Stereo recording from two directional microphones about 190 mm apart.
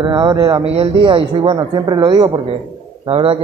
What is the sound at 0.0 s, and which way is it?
A man's voice, 25° right (ahead or behind).